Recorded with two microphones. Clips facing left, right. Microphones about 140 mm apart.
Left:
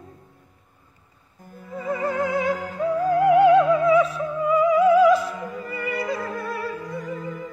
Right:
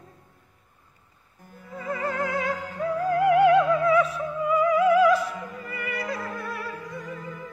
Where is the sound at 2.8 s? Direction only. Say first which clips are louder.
Left 3 dB; 25° left (ahead or behind).